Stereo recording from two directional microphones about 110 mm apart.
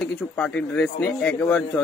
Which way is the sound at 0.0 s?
10° left (ahead or behind).